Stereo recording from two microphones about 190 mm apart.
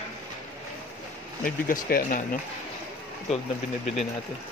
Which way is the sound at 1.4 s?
45° left (ahead or behind).